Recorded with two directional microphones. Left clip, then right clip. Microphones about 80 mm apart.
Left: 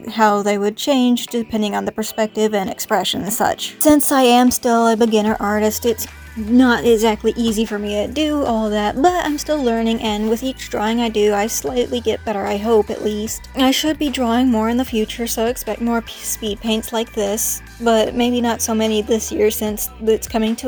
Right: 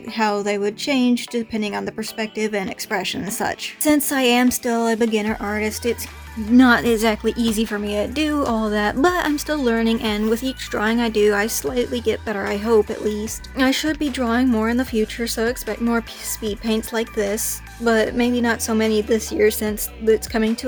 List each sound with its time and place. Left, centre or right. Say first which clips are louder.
0.2 s speech: left 5 dB; left
3.8 s speech: left 5 dB; left
5.3 s a woman's voice: left 6 dB; centre
5.5 s speech: left 5 dB; left
6.6 s a woman's voice: left 2 dB; centre; by 13.3 s left
13.6 s speech: left 3 dB; left
14.7 s a woman's voice: left 2 dB; left